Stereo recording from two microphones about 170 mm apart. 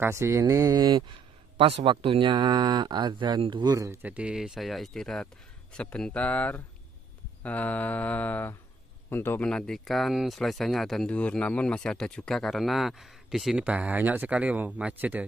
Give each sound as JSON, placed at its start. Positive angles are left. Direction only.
{"t": 0.0, "sound": "speech", "side_deg": -15}
{"t": 7.4, "sound": "mantra", "side_deg": 10}
{"t": 9.1, "sound": "speech", "side_deg": 10}